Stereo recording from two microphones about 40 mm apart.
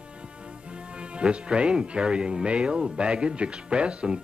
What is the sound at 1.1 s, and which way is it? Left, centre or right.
Speech, right.